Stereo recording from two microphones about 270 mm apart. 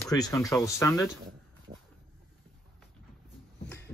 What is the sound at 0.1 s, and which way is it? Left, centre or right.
Speech, centre.